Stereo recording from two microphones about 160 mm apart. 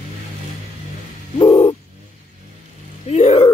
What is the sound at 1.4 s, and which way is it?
Bird, 35° left (ahead or behind).